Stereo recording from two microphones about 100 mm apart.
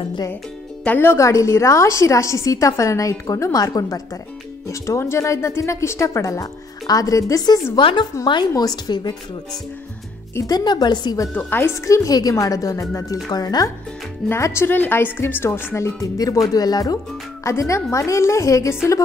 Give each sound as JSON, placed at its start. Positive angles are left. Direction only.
{"t": 0.8, "sound": "a woman's voice", "side_deg": 20}
{"t": 7.8, "sound": "speech", "side_deg": 50}
{"t": 10.3, "sound": "speech", "side_deg": 40}
{"t": 11.3, "sound": "speech", "side_deg": 20}
{"t": 11.8, "sound": "a woman's voice", "side_deg": 30}
{"t": 14.3, "sound": "a woman's voice", "side_deg": 25}